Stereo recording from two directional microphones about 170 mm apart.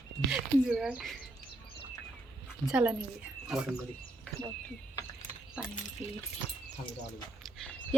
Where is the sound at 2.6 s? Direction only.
5° right (ahead or behind).